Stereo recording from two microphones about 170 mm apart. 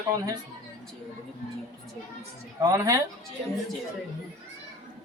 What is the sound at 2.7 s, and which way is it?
Speech, 20° right (ahead or behind).